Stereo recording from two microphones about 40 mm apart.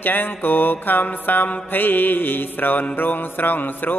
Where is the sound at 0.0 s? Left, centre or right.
Left.